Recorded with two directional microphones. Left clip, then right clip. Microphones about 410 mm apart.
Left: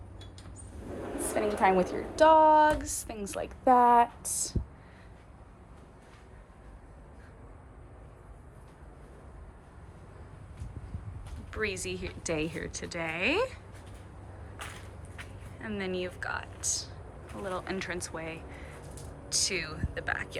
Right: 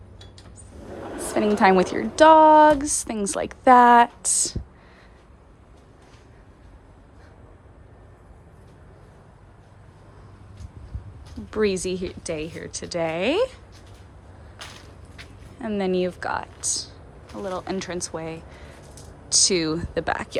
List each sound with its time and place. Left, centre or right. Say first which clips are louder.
1.3 s a woman's voice: right 8 dB; right
11.5 s speech: right 10 dB; centre
15.6 s a woman's voice: right 11 dB; centre